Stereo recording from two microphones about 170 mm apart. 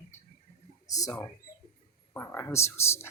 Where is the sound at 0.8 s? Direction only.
20° left (ahead or behind).